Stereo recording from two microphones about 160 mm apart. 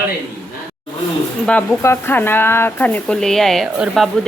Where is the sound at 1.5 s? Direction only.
15° left (ahead or behind).